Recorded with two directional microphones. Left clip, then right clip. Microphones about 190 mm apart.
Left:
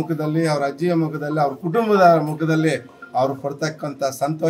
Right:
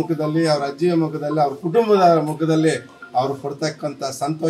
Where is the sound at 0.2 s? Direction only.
10° left (ahead or behind).